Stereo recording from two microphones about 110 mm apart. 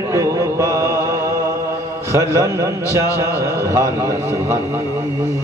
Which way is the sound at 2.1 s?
30° right (ahead or behind).